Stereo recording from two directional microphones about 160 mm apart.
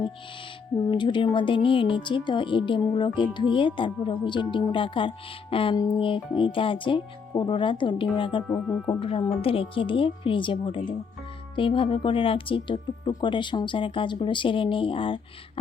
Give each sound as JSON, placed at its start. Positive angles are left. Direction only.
{"t": 0.9, "sound": "speech", "side_deg": 30}
{"t": 8.4, "sound": "speech", "side_deg": 10}
{"t": 9.0, "sound": "speech", "side_deg": 35}